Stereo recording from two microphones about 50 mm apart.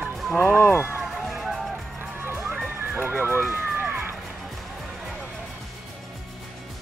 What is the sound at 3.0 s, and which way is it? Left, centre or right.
Music, right.